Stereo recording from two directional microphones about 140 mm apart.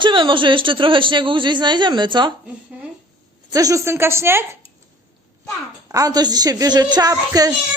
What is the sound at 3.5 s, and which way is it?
Speech, 25° right (ahead or behind).